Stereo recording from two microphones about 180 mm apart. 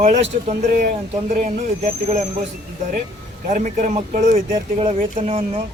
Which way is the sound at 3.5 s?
45° right (ahead or behind).